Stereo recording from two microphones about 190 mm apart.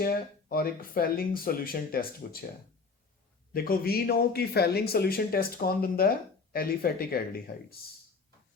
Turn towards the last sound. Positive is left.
turn(degrees=50)  # may be behind; listen again after turning